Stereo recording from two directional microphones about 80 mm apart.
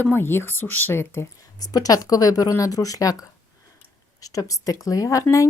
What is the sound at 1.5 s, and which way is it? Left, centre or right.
Speech, left.